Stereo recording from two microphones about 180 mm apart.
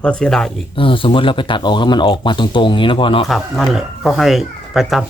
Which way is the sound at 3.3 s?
Centre (ahead or behind).